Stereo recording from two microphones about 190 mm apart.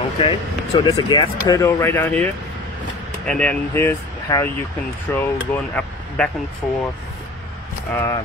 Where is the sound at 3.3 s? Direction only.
5° left (ahead or behind).